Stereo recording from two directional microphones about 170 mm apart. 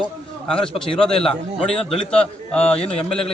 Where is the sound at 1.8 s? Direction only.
35° left (ahead or behind).